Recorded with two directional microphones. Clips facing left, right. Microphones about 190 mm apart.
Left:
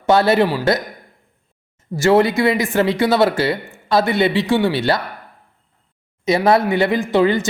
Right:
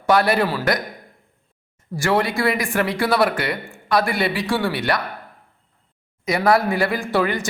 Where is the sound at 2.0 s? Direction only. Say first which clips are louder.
Left 6 dB; 25° left (ahead or behind).